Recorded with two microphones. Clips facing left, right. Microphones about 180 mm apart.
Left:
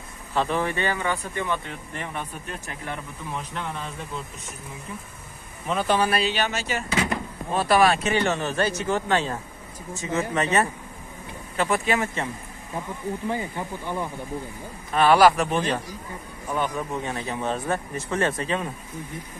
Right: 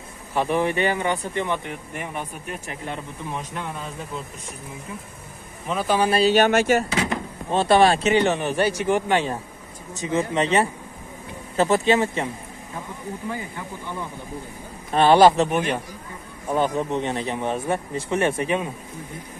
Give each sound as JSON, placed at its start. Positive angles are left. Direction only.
{"t": 0.3, "sound": "speech", "side_deg": -15}
{"t": 5.7, "sound": "speech", "side_deg": 0}
{"t": 6.0, "sound": "speech", "side_deg": -30}
{"t": 6.3, "sound": "speech", "side_deg": -55}
{"t": 7.5, "sound": "speech", "side_deg": -25}
{"t": 13.3, "sound": "speech", "side_deg": 20}
{"t": 14.9, "sound": "speech", "side_deg": -25}